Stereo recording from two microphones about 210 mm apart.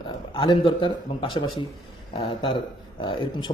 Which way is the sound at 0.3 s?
25° left (ahead or behind).